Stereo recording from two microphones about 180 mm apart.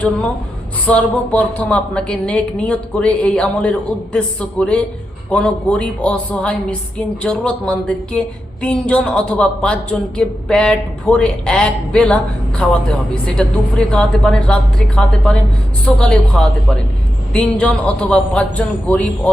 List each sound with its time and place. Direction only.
0.9 s a woman's voice: 5° left (ahead or behind)